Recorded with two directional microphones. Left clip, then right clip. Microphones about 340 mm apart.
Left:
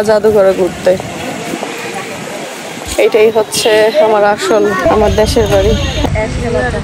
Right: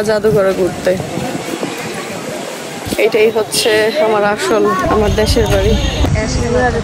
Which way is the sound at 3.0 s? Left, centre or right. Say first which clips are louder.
Left 3 dB; centre.